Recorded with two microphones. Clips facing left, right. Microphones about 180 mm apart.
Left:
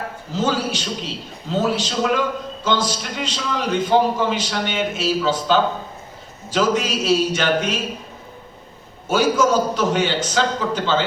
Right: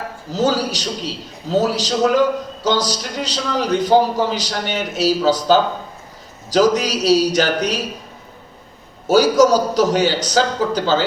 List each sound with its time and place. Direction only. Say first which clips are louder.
0.3 s a man's voice: right 3 dB; 40° right (ahead or behind)
9.0 s a man's voice: right 5 dB; 40° right (ahead or behind)